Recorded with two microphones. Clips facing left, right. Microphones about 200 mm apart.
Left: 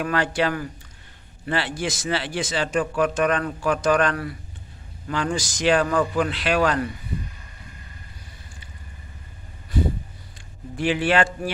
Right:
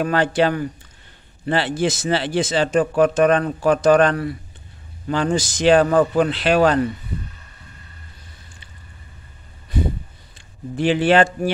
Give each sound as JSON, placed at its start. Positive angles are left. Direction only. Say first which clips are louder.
{"t": 0.0, "sound": "a man's voice", "louder": "right 5 dB", "side_deg": -30}
{"t": 10.8, "sound": "speech", "louder": "right 5 dB", "side_deg": -30}